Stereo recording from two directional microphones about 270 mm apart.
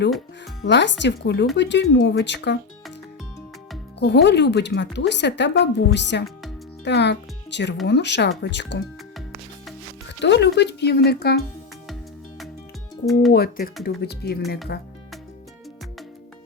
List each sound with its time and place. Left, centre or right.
0.6 s a woman's voice: left
4.0 s a woman's voice: left
10.1 s a woman's voice: left
13.3 s a woman's voice: left